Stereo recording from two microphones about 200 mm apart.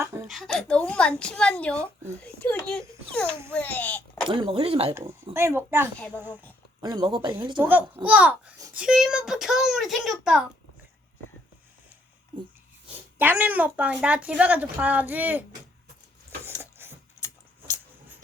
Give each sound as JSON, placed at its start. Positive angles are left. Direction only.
{"t": 0.3, "sound": "a child's voice", "side_deg": 0}
{"t": 4.3, "sound": "speech", "side_deg": -25}
{"t": 5.3, "sound": "a woman's voice", "side_deg": -10}
{"t": 6.8, "sound": "speech", "side_deg": -20}
{"t": 7.6, "sound": "a woman's voice", "side_deg": -10}
{"t": 13.1, "sound": "a woman's voice", "side_deg": -10}
{"t": 16.6, "sound": "gears", "side_deg": -10}
{"t": 17.2, "sound": "a sound", "side_deg": 15}